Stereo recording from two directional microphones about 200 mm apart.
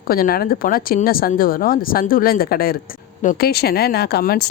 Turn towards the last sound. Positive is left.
turn(degrees=50)  # may be behind; listen again after turning